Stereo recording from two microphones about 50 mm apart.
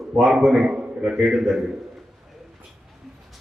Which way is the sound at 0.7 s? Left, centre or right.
Centre.